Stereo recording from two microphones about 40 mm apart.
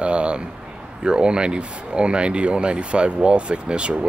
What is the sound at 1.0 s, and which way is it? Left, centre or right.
Speech, right.